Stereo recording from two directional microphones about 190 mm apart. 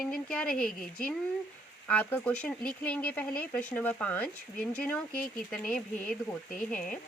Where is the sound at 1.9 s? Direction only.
10° left (ahead or behind).